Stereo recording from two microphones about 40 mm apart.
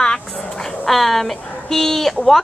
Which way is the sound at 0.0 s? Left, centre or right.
Centre.